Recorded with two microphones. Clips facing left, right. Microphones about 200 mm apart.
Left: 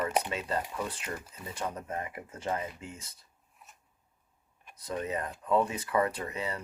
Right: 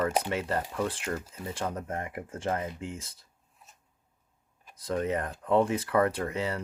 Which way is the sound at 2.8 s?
90° right.